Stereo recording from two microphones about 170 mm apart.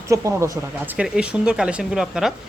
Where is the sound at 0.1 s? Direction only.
15° right (ahead or behind).